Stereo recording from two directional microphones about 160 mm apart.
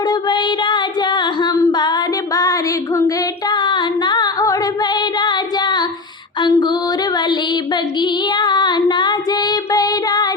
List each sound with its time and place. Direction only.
0.1 s female singing: 30° left (ahead or behind)
3.5 s music: 30° left (ahead or behind)
6.4 s female singing: 25° left (ahead or behind)